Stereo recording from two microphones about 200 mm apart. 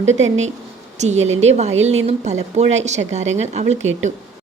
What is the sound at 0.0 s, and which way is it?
A woman's voice, 35° right (ahead or behind).